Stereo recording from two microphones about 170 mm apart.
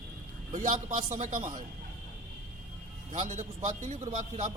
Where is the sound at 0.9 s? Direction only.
45° right (ahead or behind).